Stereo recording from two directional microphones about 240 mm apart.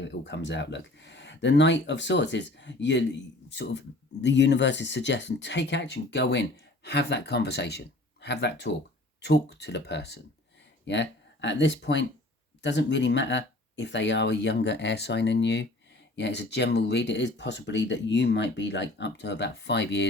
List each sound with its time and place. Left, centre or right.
0.0 s speech: left